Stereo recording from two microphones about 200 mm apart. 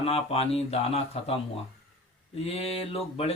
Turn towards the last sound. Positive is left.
turn(degrees=30)  # may be behind; listen again after turning